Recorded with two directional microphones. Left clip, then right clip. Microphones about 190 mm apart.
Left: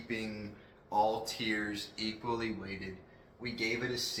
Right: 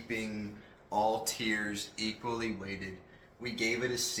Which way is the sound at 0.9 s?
15° left (ahead or behind).